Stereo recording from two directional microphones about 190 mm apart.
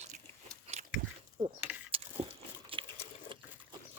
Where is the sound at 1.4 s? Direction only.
30° right (ahead or behind).